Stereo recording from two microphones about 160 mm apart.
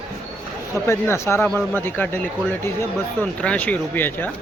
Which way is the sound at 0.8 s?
15° left (ahead or behind).